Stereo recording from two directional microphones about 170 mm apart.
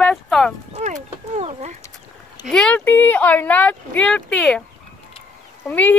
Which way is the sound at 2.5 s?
5° left (ahead or behind).